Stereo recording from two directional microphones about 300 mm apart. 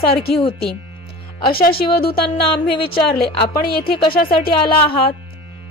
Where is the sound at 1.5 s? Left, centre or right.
Left.